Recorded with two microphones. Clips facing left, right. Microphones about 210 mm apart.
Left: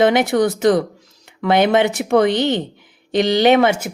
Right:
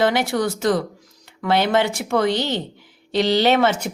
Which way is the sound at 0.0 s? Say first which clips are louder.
Left 5 dB; 20° left (ahead or behind).